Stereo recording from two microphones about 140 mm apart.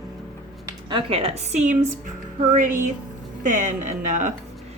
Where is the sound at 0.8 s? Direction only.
40° right (ahead or behind); by 4.3 s 65° right (ahead or behind).